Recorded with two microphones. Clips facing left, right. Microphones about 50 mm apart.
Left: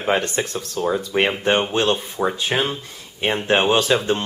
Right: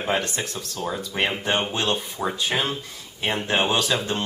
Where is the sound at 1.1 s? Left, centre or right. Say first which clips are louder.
Left 5 dB; left.